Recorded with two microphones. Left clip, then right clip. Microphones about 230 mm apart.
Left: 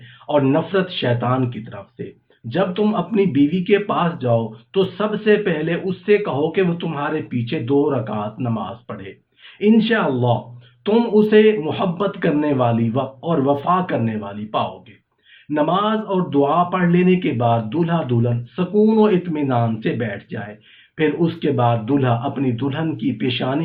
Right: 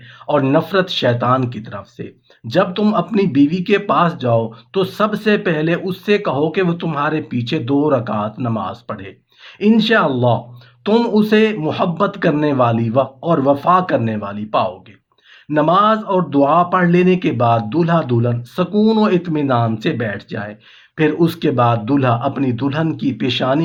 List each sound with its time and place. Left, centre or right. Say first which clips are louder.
0.3 s speech: right 2 dB; right